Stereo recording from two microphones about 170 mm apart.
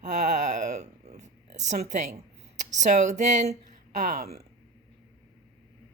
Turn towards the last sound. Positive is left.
turn(degrees=-50)  # may be behind; listen again after turning